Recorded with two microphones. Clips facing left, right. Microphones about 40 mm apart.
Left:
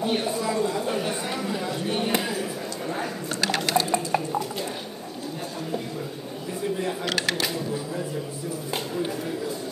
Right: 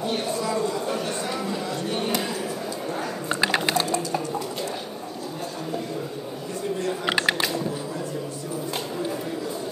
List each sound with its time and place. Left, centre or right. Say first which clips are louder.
0.0 s chatter: left 1 dB; centre
3.3 s liquid: right 3 dB; centre
3.9 s music: left 1 dB; centre
7.1 s a sound: right 5 dB; centre